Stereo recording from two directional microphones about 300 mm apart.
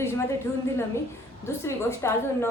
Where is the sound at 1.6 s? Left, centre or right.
Centre.